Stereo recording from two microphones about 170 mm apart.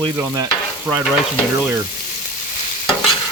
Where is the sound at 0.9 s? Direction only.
10° right (ahead or behind).